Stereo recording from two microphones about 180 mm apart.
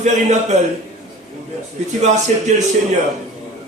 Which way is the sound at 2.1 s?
40° right (ahead or behind).